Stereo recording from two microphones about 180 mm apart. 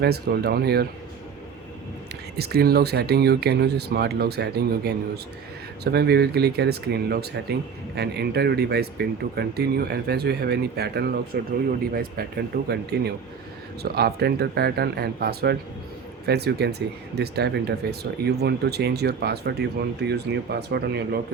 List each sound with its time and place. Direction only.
0.0 s speech: 65° right (ahead or behind)
2.3 s speech: 60° right (ahead or behind)
12.6 s speech: 65° right (ahead or behind)